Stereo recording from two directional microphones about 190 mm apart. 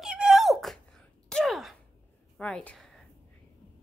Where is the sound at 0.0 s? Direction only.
5° right (ahead or behind).